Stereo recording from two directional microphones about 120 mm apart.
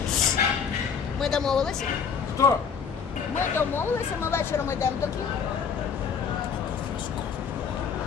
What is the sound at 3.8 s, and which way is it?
Speech, 20° left (ahead or behind).